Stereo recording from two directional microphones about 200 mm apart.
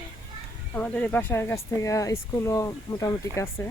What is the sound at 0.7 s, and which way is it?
Speech, 5° left (ahead or behind).